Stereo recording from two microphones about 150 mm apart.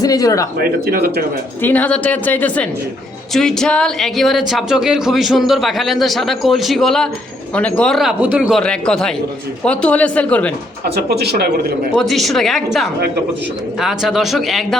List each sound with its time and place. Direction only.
0.0 s speech: 25° left (ahead or behind)
0.6 s speech: 90° right
1.6 s a woman's voice: 10° left (ahead or behind)
10.9 s speech: 90° right
11.9 s speech: centre (ahead or behind)